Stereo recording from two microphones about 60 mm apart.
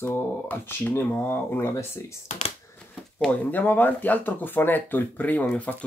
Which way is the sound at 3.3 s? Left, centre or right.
Left.